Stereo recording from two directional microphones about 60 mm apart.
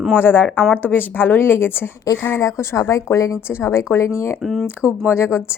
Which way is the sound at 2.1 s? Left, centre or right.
Left.